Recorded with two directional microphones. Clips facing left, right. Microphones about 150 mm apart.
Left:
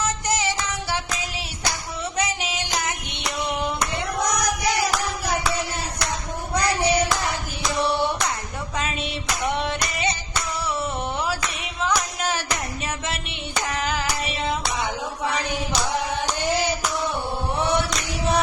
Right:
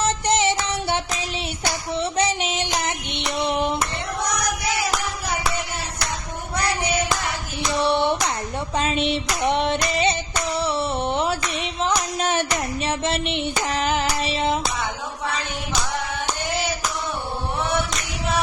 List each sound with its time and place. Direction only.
0.0 s music: 25° right (ahead or behind)
2.0 s child singing: 30° right (ahead or behind)
7.8 s hands: 25° right (ahead or behind)
8.7 s a sound: 30° right (ahead or behind)
9.4 s child singing: 25° right (ahead or behind)
10.6 s a sound: 30° right (ahead or behind)
13.7 s hands: 25° right (ahead or behind)